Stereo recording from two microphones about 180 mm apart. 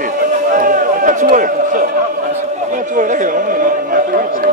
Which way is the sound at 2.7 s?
45° right (ahead or behind).